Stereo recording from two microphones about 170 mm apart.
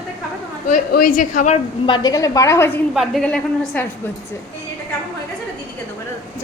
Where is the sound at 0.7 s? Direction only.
55° left (ahead or behind).